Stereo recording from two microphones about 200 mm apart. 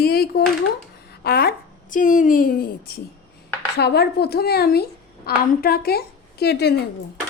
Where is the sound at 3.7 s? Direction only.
55° left (ahead or behind).